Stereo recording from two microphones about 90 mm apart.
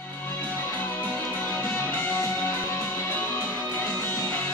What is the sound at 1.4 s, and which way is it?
Music, 25° left (ahead or behind).